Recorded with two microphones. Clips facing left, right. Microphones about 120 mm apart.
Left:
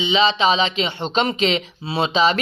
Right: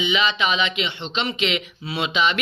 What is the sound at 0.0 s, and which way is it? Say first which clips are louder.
Speech: left 5 dB; 30° left (ahead or behind).